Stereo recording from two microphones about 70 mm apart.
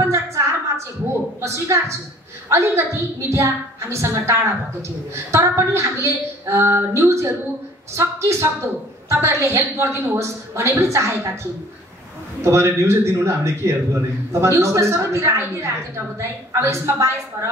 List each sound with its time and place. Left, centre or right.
0.0 s a sound: right
2.5 s a woman's voice: right
12.4 s a woman's voice: right